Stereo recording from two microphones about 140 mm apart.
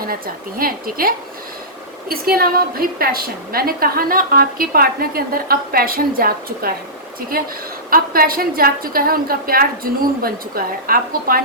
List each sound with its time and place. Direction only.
0.6 s a woman's voice: 90° right